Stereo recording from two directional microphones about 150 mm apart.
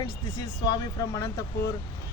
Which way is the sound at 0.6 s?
25° left (ahead or behind).